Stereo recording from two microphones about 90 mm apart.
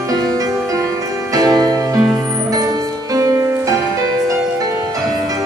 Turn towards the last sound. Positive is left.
turn(degrees=-40)  # may be behind; listen again after turning